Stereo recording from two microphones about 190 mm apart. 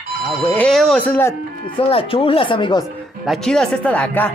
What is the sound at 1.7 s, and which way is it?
Speech, 30° left (ahead or behind).